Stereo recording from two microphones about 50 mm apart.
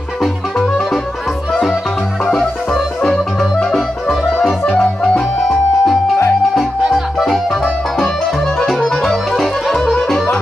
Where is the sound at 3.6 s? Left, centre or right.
Centre.